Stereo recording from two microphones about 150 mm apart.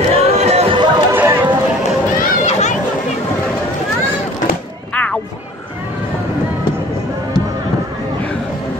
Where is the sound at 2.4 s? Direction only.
50° left (ahead or behind).